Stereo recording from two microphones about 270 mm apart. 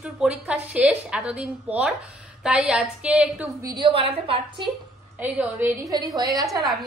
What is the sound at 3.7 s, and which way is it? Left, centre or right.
Speech, centre.